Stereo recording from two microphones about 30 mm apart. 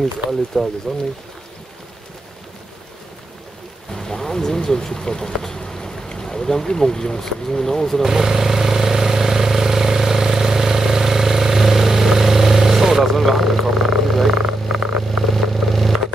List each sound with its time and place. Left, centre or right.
0.3 s speech: centre
3.9 s a sound: centre
4.6 s speech: centre
6.1 s boat: centre
6.7 s speech: centre
8.0 s vehicle: centre
13.0 s a sound: centre
14.4 s vehicle: centre